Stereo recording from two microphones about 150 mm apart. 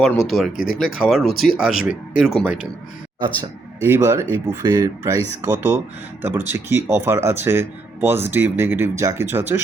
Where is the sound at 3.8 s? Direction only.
15° right (ahead or behind).